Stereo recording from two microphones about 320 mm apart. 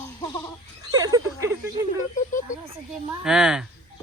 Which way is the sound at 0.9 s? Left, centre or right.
Centre.